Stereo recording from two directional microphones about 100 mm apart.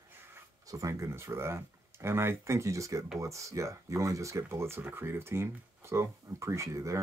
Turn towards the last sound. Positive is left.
turn(degrees=-30)  # may be behind; listen again after turning